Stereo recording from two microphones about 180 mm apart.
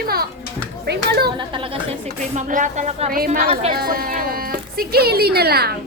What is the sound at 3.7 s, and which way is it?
Speech, 55° right (ahead or behind).